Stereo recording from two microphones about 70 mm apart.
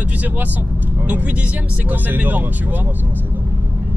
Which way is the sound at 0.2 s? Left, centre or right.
Right.